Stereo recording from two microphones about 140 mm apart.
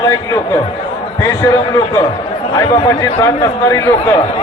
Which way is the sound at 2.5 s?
20° left (ahead or behind).